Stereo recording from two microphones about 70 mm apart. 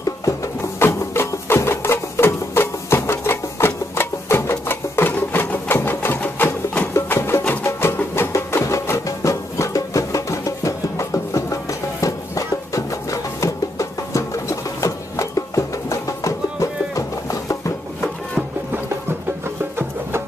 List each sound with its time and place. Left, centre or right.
0.0 s music: left
0.7 s music: left
6.9 s music: left